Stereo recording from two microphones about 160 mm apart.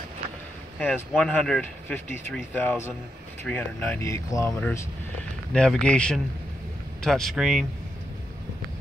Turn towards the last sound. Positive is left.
turn(degrees=0)  # may be behind; listen again after turning